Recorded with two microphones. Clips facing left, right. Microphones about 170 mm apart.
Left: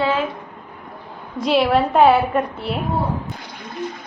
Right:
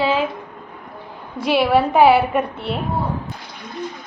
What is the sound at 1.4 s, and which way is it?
A woman's voice, 5° right (ahead or behind).